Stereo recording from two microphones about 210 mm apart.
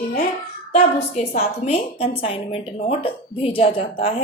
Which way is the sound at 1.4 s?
30° left (ahead or behind).